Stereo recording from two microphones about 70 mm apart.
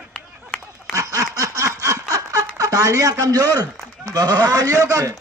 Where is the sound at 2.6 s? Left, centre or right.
Right.